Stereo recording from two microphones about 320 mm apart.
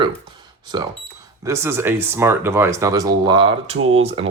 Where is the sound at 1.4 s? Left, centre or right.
Centre.